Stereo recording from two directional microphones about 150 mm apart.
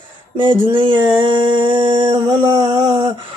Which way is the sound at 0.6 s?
35° right (ahead or behind).